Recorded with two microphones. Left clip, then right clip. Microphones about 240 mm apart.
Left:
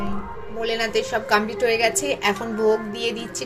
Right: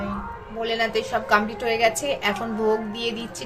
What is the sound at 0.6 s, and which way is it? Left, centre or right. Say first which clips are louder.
A woman's voice: left 1 dB; centre.